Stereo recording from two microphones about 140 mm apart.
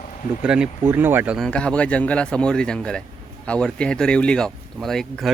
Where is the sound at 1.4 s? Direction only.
5° left (ahead or behind).